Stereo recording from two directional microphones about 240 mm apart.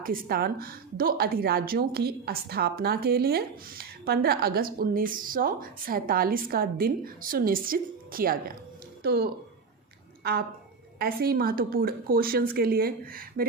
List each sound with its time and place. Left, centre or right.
0.0 s a woman's voice: right
11.0 s a woman's voice: right